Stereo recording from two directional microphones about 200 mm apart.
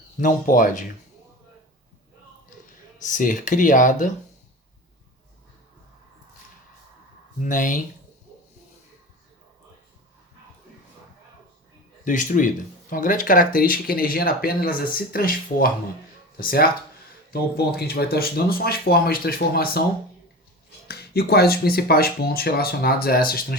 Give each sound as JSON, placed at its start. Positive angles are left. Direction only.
{"t": 0.2, "sound": "speech", "side_deg": 40}
{"t": 3.0, "sound": "speech", "side_deg": 40}
{"t": 7.4, "sound": "speech", "side_deg": 40}
{"t": 12.0, "sound": "speech", "side_deg": 40}
{"t": 20.8, "sound": "speech", "side_deg": 50}